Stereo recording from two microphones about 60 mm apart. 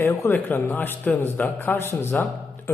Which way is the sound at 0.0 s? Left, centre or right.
Left.